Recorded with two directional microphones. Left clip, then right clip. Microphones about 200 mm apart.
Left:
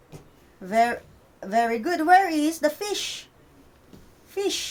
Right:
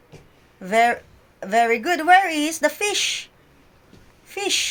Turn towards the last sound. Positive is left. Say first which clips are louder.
# right 4 dB
turn(degrees=-35)  # may be behind; listen again after turning